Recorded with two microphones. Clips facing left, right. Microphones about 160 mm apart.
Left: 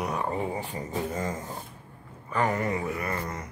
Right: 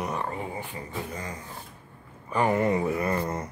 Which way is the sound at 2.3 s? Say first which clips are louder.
Right 3 dB; 20° right (ahead or behind).